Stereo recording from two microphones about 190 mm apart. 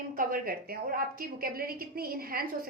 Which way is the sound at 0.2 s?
50° right (ahead or behind).